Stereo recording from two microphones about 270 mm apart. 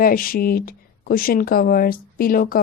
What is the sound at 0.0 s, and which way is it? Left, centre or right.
Speech, left.